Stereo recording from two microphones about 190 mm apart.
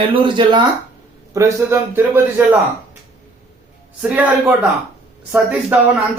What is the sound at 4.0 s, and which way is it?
A man's voice, 10° right (ahead or behind).